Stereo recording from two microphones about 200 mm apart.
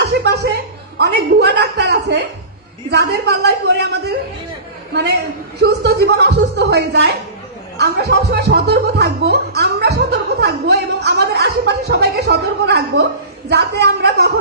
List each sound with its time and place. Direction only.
0.0 s music: 55° right (ahead or behind)
2.9 s speech: 55° right (ahead or behind)
5.6 s speech: 55° right (ahead or behind)